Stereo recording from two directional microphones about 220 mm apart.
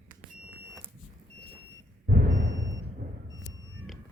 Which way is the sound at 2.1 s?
40° right (ahead or behind).